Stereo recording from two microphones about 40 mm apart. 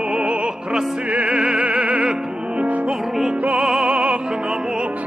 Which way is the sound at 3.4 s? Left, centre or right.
Right.